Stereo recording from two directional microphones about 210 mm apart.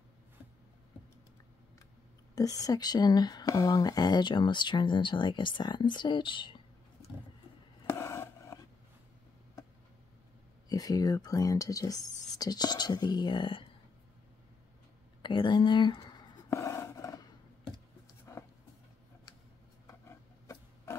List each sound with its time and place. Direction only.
2.3 s speech: 15° left (ahead or behind)
7.9 s scrape: 10° left (ahead or behind)
10.7 s speech: 15° left (ahead or behind)
15.2 s a sound: 20° left (ahead or behind)
18.3 s music: 15° left (ahead or behind)
19.9 s a sound: 10° left (ahead or behind)